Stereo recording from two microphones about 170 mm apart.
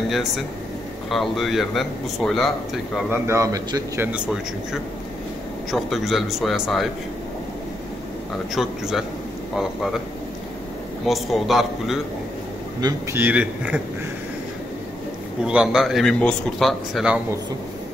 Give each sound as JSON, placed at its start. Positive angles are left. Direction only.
{"t": 1.1, "sound": "speech", "side_deg": 0}
{"t": 3.1, "sound": "a man's voice", "side_deg": -15}
{"t": 4.1, "sound": "a man's voice", "side_deg": -5}
{"t": 5.7, "sound": "speech", "side_deg": 0}
{"t": 8.5, "sound": "speech", "side_deg": 0}
{"t": 11.1, "sound": "speech", "side_deg": 0}
{"t": 12.8, "sound": "a man's voice", "side_deg": -10}
{"t": 15.4, "sound": "speech", "side_deg": -5}